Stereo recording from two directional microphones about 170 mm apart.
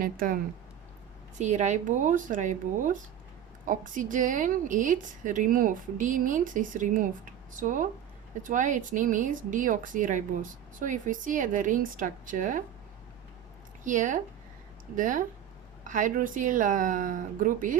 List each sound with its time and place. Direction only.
0.0 s speech: 55° right (ahead or behind)
1.4 s speech: 45° right (ahead or behind)
13.8 s speech: 50° right (ahead or behind)